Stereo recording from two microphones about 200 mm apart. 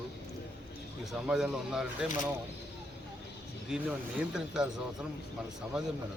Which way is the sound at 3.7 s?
5° right (ahead or behind).